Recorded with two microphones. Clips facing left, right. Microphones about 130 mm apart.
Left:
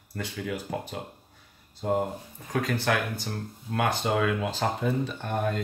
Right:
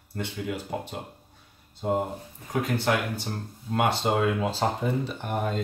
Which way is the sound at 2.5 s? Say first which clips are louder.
Right 1 dB; 20° right (ahead or behind).